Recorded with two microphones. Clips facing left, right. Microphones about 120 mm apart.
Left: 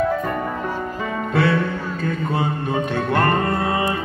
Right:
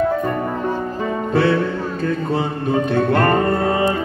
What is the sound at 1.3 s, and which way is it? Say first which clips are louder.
Music: right 2 dB; 30° right (ahead or behind).